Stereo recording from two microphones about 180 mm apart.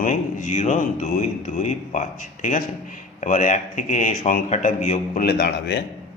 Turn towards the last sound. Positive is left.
turn(degrees=65)  # may be behind; listen again after turning